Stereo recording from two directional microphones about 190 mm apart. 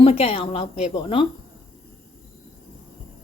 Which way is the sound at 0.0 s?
30° left (ahead or behind).